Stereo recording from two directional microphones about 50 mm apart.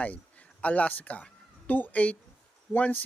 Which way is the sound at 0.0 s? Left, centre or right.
Left.